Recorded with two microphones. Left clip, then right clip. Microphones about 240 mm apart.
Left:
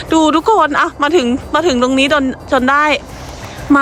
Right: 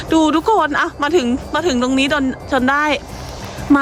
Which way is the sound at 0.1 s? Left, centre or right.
Centre.